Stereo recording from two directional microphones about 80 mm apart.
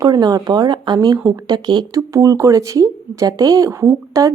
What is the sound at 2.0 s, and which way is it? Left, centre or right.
Speech, right.